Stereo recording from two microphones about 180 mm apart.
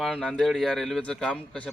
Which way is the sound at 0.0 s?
5° left (ahead or behind).